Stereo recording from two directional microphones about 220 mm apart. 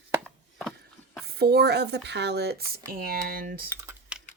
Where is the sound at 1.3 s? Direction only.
45° right (ahead or behind).